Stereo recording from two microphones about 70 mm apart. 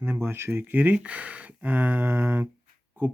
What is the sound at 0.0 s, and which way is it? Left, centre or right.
Speech, right.